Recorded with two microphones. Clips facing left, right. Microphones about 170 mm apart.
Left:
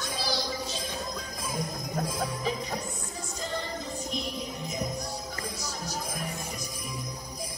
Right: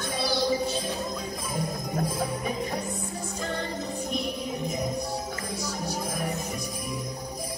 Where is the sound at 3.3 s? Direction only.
55° right (ahead or behind).